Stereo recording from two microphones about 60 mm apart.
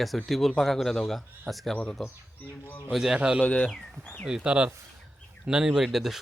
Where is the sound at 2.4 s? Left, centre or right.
Left.